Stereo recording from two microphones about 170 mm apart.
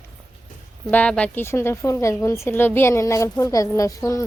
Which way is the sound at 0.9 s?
10° left (ahead or behind).